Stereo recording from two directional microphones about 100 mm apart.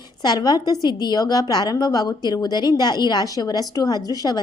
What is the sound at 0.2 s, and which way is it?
A woman's voice, 45° left (ahead or behind).